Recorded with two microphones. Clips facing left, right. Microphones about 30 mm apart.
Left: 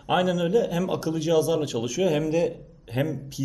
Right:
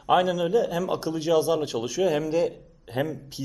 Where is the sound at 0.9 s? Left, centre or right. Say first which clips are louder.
Even; right.